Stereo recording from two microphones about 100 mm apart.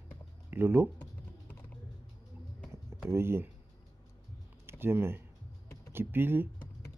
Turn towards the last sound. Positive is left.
turn(degrees=-20)  # may be behind; listen again after turning